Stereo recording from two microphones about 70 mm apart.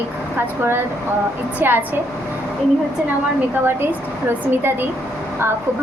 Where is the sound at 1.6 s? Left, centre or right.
Right.